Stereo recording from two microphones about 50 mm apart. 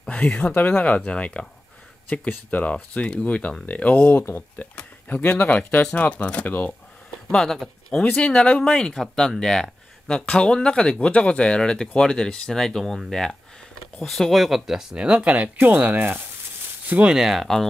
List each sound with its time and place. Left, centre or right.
0.1 s speech: left
4.2 s speech: left
5.1 s speech: left
7.2 s speech: centre
8.2 s speech: left; by 15.2 s centre
15.2 s speech: right
17.1 s speech: centre